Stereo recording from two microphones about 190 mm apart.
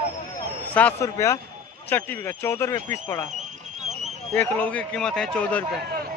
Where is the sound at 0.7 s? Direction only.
10° left (ahead or behind).